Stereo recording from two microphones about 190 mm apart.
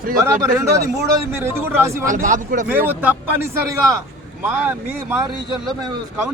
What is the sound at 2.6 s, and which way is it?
A man's voice, 10° right (ahead or behind).